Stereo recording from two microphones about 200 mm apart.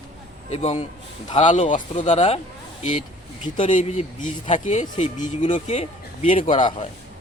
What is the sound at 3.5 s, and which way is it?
Speech, 40° left (ahead or behind).